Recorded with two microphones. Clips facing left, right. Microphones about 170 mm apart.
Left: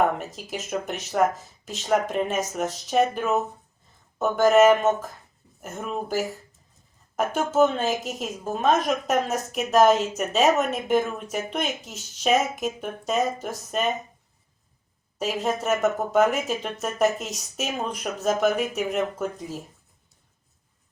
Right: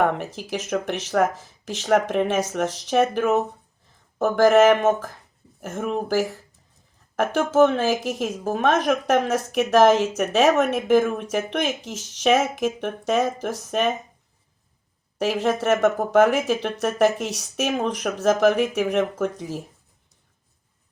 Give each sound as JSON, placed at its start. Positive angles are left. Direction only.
{"t": 0.7, "sound": "a woman's voice", "side_deg": -90}
{"t": 4.4, "sound": "a woman's voice", "side_deg": -85}
{"t": 15.2, "sound": "speech", "side_deg": -90}